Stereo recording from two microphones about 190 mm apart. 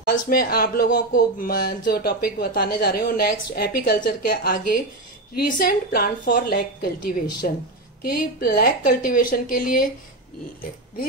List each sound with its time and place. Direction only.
0.1 s a woman's voice: 50° left (ahead or behind)